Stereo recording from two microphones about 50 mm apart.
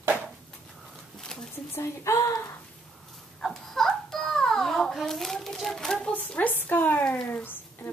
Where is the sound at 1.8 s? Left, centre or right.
Left.